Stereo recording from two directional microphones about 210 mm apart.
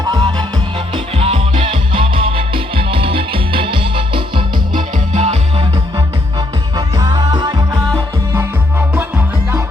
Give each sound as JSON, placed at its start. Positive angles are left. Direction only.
{"t": 0.0, "sound": "music", "side_deg": -20}
{"t": 6.7, "sound": "music", "side_deg": -20}